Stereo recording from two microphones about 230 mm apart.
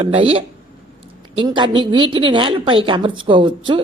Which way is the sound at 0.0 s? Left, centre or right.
Right.